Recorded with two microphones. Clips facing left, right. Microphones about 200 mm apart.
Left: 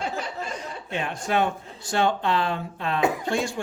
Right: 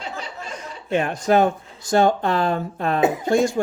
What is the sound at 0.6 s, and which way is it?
Chuckle, 45° right (ahead or behind).